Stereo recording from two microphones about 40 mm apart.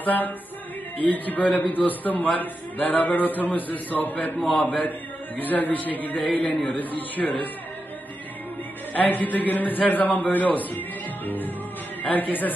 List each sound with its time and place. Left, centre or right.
0.0 s music: left
0.9 s a man's voice: left
6.4 s a man's voice: left
6.8 s a man's voice: left
8.9 s a man's voice: left
11.2 s music: left
12.0 s a man's voice: left